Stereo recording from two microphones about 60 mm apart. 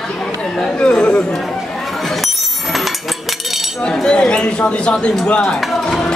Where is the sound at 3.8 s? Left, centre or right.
Centre.